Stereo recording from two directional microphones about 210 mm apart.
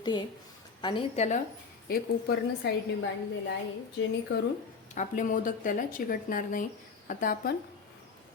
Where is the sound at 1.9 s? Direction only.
45° left (ahead or behind).